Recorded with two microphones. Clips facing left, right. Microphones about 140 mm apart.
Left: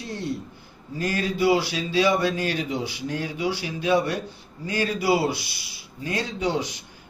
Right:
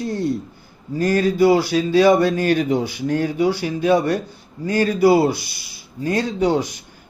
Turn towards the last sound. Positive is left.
turn(degrees=-45)  # may be behind; listen again after turning